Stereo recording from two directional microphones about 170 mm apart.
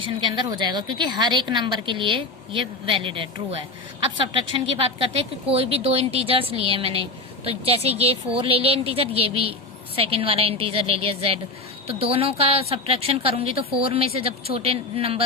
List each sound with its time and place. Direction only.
0.0 s a woman's voice: 25° right (ahead or behind)